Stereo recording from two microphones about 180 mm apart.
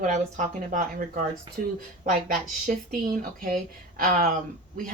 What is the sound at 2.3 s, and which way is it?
Speech, 50° right (ahead or behind).